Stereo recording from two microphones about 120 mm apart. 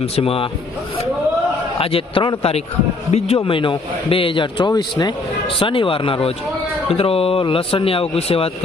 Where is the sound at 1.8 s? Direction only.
50° left (ahead or behind).